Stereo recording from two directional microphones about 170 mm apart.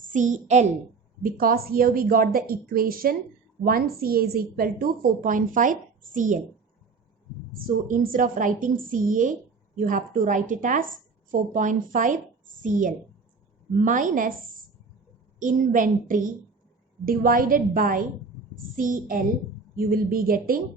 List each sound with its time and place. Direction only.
0.1 s a woman's voice: 45° right (ahead or behind)
1.2 s a woman's voice: 55° right (ahead or behind)
7.9 s a woman's voice: 55° right (ahead or behind)
15.4 s a woman's voice: 50° right (ahead or behind)